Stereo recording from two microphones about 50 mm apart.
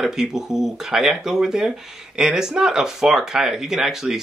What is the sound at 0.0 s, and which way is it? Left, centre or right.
Speech, centre.